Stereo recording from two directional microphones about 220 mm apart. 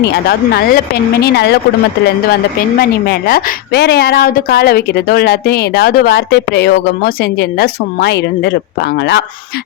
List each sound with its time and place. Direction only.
0.0 s a woman's voice: 50° left (ahead or behind)